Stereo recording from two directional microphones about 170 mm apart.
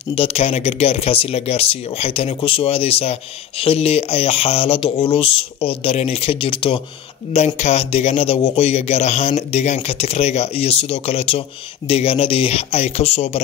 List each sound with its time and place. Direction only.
0.1 s speech: 35° left (ahead or behind)